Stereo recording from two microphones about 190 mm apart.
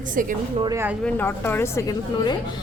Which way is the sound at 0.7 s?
10° right (ahead or behind).